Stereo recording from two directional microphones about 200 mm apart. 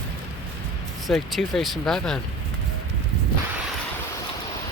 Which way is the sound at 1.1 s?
Centre (ahead or behind).